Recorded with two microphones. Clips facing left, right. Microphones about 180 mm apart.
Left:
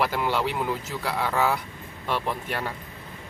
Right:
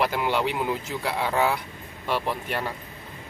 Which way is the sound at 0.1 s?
15° right (ahead or behind).